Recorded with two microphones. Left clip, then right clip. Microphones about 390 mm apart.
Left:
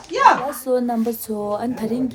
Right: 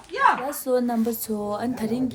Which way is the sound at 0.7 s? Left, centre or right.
Centre.